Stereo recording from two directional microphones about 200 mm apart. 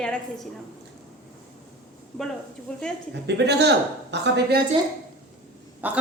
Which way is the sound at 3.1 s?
60° right (ahead or behind).